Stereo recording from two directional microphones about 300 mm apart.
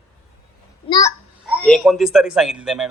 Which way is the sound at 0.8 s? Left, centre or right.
Centre.